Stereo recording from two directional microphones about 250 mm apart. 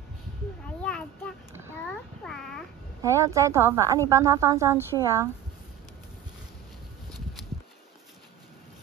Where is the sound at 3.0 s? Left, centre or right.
Centre.